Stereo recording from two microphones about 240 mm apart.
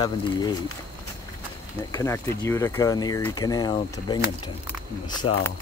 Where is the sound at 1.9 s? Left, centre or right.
Centre.